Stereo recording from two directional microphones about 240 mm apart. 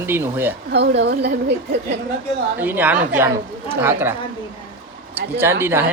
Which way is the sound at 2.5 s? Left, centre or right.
Centre.